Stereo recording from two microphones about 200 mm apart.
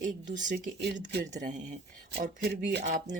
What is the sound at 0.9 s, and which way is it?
Speech, 55° right (ahead or behind).